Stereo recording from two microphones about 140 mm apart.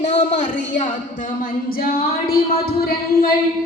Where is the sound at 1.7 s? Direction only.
90° left.